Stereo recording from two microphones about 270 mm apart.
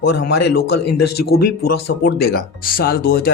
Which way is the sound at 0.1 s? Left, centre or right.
Left.